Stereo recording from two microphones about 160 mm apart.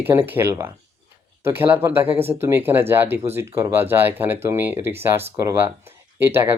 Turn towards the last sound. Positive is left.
turn(degrees=-15)  # may be behind; listen again after turning